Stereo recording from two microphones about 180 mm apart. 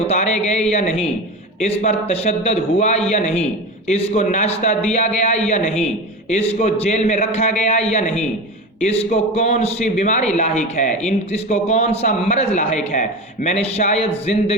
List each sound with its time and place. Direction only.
0.1 s a man's voice: 40° left (ahead or behind)
9.1 s a man's voice: 35° left (ahead or behind)